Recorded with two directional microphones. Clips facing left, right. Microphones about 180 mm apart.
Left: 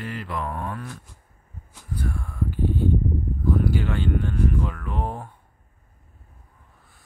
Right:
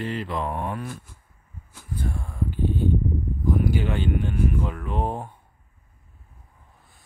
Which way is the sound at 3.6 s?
15° right (ahead or behind).